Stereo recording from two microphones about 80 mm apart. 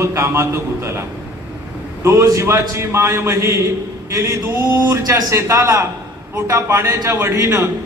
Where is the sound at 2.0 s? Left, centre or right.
Right.